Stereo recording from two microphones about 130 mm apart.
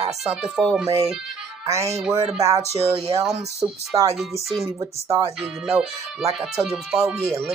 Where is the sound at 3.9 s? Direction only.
25° right (ahead or behind).